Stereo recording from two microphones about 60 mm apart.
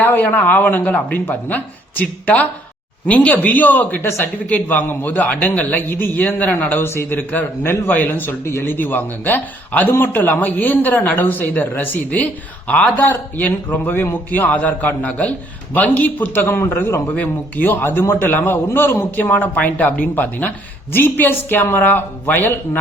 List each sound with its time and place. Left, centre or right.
0.0 s a sound: left
0.3 s speech: left
6.8 s a man's voice: left
7.2 s a man's voice: left